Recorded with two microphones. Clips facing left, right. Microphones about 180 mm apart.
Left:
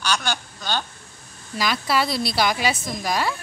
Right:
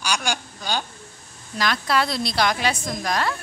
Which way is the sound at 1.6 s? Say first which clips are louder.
Even; 5° left (ahead or behind).